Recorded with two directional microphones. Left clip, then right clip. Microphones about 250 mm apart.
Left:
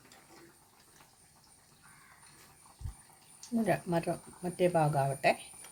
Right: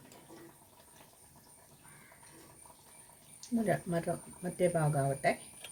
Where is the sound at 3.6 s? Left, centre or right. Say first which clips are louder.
Left 2 dB; left.